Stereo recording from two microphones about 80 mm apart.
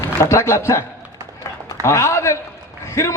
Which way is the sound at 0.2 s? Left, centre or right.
Left.